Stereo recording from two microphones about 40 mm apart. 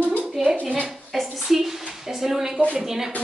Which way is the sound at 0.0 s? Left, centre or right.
Right.